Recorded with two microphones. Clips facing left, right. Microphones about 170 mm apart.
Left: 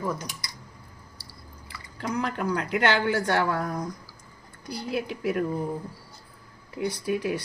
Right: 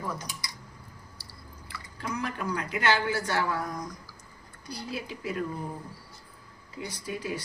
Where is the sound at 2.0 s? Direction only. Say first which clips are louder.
Left 5 dB; 65° left (ahead or behind).